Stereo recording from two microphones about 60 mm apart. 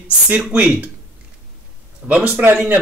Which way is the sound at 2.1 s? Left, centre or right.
Right.